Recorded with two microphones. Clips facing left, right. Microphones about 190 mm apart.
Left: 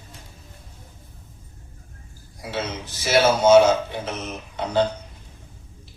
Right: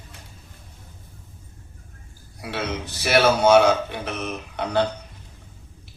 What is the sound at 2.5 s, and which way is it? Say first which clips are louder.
A man's voice: right 1 dB; 65° right (ahead or behind).